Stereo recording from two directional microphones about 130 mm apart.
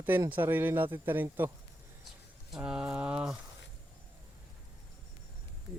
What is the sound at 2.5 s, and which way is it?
Speech, 5° right (ahead or behind).